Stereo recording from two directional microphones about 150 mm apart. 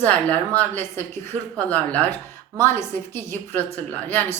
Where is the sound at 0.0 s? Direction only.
10° left (ahead or behind).